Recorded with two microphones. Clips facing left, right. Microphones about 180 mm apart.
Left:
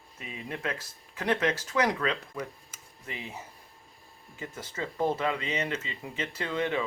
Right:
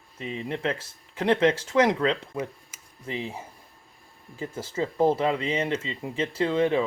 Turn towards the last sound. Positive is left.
turn(degrees=-30)  # may be behind; listen again after turning